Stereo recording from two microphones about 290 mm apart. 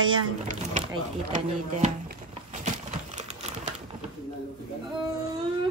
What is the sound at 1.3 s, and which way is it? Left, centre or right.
Speech, right.